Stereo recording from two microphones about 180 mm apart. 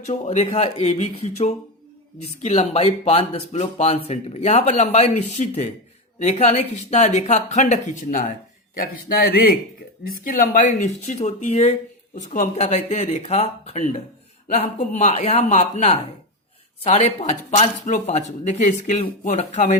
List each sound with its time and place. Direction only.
0.0 s speech: 35° left (ahead or behind)